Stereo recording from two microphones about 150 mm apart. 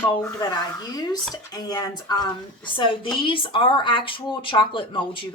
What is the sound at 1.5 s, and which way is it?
A woman's voice, 25° left (ahead or behind).